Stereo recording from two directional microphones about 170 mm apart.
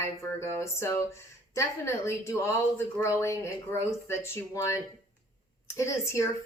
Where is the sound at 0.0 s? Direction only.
15° left (ahead or behind).